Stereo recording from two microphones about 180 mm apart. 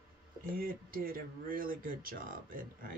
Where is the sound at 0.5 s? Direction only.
50° right (ahead or behind).